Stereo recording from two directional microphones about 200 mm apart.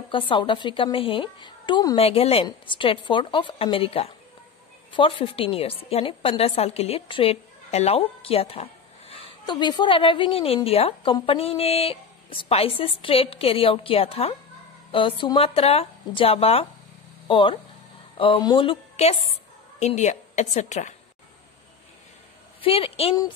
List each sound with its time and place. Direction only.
0.1 s a woman's voice: 25° left (ahead or behind)
22.6 s a woman's voice: 30° left (ahead or behind)